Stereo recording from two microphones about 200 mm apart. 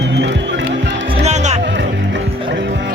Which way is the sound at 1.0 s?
30° right (ahead or behind).